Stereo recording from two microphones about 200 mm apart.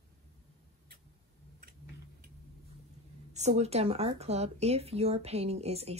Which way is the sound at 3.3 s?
35° right (ahead or behind).